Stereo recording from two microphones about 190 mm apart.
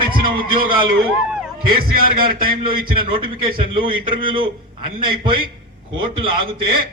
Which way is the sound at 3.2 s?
25° right (ahead or behind).